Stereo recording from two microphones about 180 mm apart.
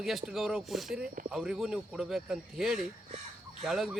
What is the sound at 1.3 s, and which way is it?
A man's voice, 5° right (ahead or behind).